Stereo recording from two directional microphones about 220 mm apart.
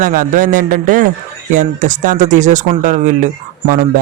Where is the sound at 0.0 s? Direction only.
40° right (ahead or behind).